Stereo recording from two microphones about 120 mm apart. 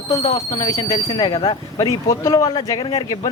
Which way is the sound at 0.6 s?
30° left (ahead or behind).